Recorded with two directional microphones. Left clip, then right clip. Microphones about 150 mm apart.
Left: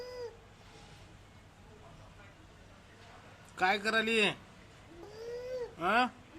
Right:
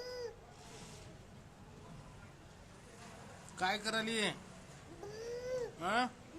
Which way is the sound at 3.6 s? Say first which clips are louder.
Left 7 dB; 30° left (ahead or behind).